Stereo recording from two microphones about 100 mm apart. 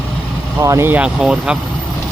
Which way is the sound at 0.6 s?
30° right (ahead or behind).